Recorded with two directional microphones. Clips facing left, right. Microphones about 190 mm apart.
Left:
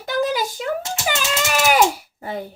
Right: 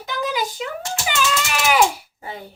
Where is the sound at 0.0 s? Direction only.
45° left (ahead or behind).